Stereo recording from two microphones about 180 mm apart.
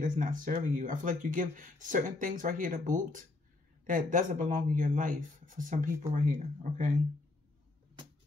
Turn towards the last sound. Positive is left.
turn(degrees=-45)  # may be behind; listen again after turning